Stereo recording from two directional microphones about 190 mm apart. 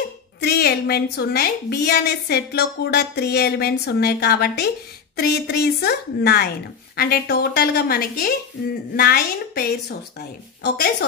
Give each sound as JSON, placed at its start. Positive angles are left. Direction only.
{"t": 0.4, "sound": "a woman's voice", "side_deg": 55}